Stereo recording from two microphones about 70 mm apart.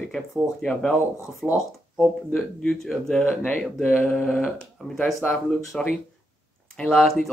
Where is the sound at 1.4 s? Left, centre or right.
Right.